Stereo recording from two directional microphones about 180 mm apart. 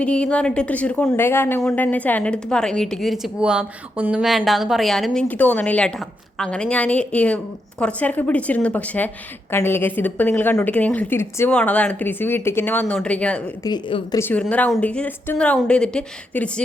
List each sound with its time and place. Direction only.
0.0 s a woman's voice: 5° left (ahead or behind)
13.7 s a woman's voice: 20° left (ahead or behind)
14.5 s a woman's voice: 10° left (ahead or behind)